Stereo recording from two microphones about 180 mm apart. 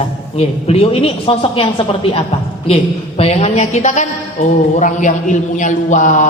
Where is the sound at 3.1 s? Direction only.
35° left (ahead or behind).